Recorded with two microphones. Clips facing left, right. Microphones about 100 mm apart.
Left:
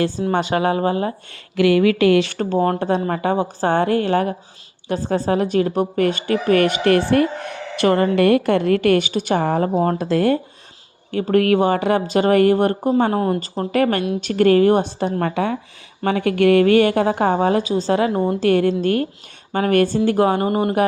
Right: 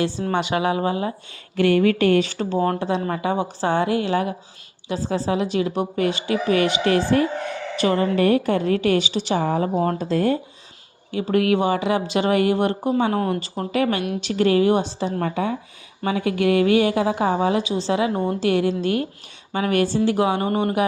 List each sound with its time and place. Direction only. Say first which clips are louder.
0.3 s a woman's voice: left 2 dB; 45° left (ahead or behind)
1.3 s speech: left 2 dB; 90° left
2.7 s a woman's voice: left 3 dB; 50° left (ahead or behind)
9.7 s speech: left 3 dB; 35° left (ahead or behind)
10.0 s speech: left 3 dB; 70° left (ahead or behind)
11.1 s a woman's voice: left 3 dB; 50° left (ahead or behind)
13.1 s speech: left 3 dB; 30° left (ahead or behind)
13.7 s a woman's voice: left 3 dB; 50° left (ahead or behind)
15.2 s speech: left 2 dB; 70° left (ahead or behind)
16.0 s a woman's voice: left 4 dB; 60° left (ahead or behind)
18.1 s a woman's voice: left 3 dB; 20° left (ahead or behind)
18.3 s a woman's voice: left 4 dB; 50° left (ahead or behind)